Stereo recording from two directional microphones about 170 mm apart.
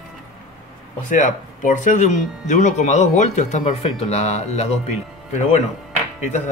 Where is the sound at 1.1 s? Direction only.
50° left (ahead or behind).